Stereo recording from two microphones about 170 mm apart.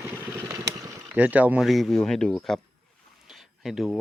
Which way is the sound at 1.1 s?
10° right (ahead or behind).